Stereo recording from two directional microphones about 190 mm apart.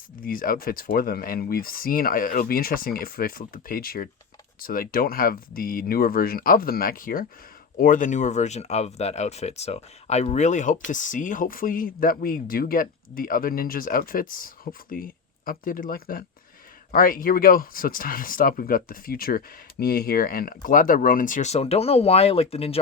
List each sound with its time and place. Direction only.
0.2 s speech: 50° left (ahead or behind); by 22.8 s 30° left (ahead or behind)